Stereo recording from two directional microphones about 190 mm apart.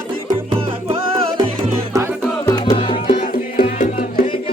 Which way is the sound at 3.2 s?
45° left (ahead or behind).